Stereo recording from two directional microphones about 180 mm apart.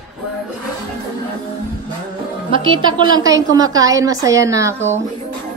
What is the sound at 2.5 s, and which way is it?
A woman's voice, 25° right (ahead or behind).